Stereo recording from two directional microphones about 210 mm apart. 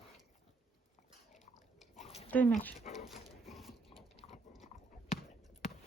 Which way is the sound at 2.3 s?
10° left (ahead or behind).